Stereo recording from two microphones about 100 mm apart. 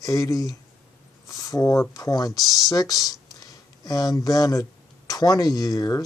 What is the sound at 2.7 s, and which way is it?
Speech, 35° left (ahead or behind).